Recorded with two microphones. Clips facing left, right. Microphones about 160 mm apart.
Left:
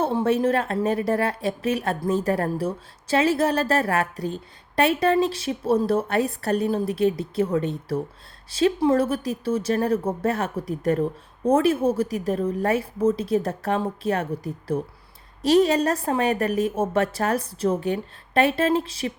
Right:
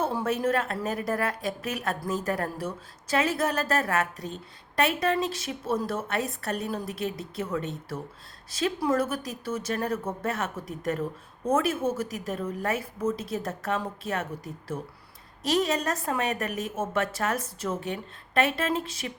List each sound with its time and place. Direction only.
0.0 s a woman's voice: 30° left (ahead or behind)